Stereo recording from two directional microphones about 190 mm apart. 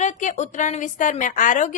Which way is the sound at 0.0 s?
40° left (ahead or behind).